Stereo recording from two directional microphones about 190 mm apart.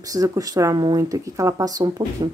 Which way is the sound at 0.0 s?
20° right (ahead or behind).